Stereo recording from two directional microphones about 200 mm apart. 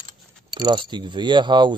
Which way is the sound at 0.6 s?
20° right (ahead or behind).